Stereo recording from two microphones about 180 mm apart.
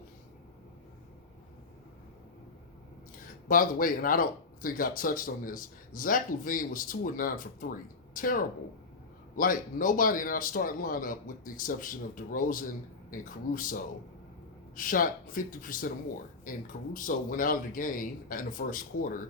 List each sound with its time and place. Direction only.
3.5 s a man's voice: 50° left (ahead or behind)
14.8 s a man's voice: 50° left (ahead or behind)